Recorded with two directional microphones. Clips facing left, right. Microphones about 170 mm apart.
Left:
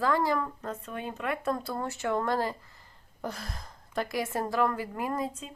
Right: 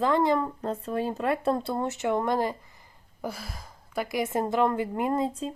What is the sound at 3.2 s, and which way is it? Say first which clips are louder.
Speech: right 2 dB; 5° right (ahead or behind).